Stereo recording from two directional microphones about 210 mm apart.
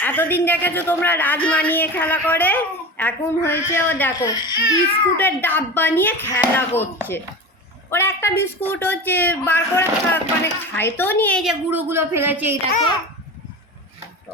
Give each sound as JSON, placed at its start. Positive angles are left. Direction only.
{"t": 0.0, "sound": "speech", "side_deg": 10}
{"t": 7.9, "sound": "speech", "side_deg": 10}
{"t": 11.7, "sound": "a man's voice", "side_deg": -10}